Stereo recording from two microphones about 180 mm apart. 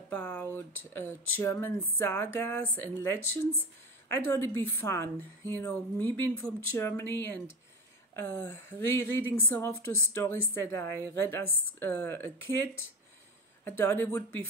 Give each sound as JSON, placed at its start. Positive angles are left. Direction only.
{"t": 0.1, "sound": "speech", "side_deg": 10}
{"t": 13.7, "sound": "speech", "side_deg": 10}